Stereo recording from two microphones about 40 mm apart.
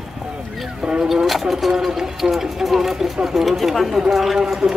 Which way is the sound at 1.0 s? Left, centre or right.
Centre.